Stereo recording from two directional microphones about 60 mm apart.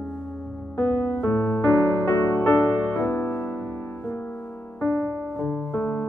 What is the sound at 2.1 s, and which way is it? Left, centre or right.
Music, left.